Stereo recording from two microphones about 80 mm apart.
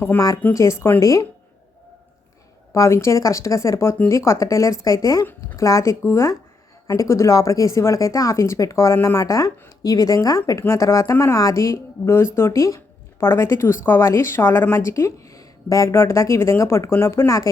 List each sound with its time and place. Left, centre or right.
0.5 s speech: left
2.7 s speech: left
9.2 s speech: left